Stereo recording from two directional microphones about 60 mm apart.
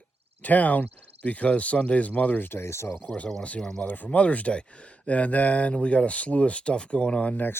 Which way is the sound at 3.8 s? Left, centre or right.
Left.